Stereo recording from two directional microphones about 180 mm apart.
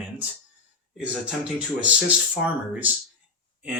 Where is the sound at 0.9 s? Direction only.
5° right (ahead or behind).